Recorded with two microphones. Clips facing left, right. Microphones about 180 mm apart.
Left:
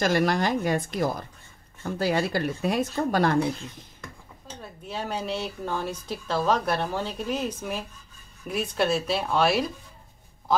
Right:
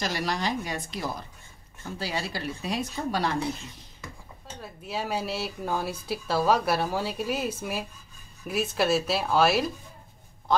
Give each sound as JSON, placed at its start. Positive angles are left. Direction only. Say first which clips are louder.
{"t": 0.0, "sound": "speech", "louder": "left 6 dB", "side_deg": 55}
{"t": 4.6, "sound": "speech", "louder": "right 1 dB", "side_deg": -5}